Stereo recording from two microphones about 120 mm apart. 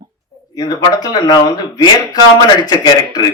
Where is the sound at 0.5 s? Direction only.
35° left (ahead or behind).